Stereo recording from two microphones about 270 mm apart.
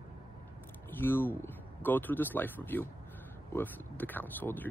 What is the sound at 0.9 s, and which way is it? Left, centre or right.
Speech, centre.